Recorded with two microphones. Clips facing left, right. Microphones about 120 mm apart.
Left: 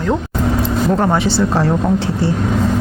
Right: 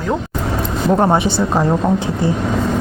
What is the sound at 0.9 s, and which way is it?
Speech, 25° right (ahead or behind).